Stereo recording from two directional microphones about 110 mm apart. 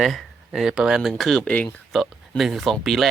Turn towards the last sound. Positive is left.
turn(degrees=0)  # may be behind; listen again after turning